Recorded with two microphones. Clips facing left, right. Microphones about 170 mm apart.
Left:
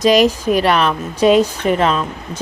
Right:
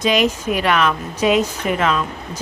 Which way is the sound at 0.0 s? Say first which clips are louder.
Left 5 dB; 40° left (ahead or behind).